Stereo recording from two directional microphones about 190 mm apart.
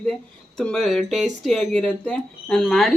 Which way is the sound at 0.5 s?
Centre (ahead or behind).